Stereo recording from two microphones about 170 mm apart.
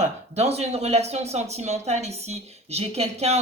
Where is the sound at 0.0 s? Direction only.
40° right (ahead or behind).